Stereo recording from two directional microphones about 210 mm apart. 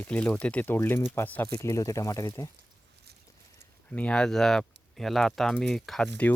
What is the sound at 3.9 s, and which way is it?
Speech, 5° left (ahead or behind).